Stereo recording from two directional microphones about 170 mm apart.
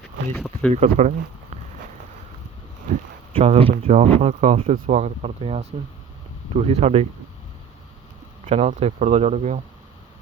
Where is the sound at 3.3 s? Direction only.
35° right (ahead or behind).